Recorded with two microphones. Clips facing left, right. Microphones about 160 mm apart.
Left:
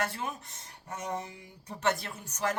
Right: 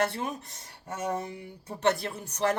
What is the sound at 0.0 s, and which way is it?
Speech, 35° right (ahead or behind).